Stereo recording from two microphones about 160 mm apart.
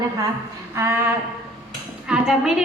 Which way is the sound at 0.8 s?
15° right (ahead or behind).